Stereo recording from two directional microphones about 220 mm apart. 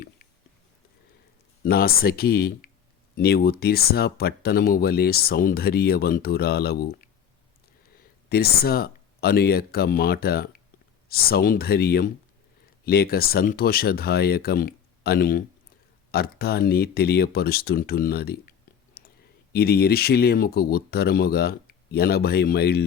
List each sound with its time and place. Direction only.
1.6 s speech: 40° left (ahead or behind)
7.9 s speech: 45° left (ahead or behind)
19.0 s clicking: 45° left (ahead or behind)
19.5 s speech: 45° left (ahead or behind)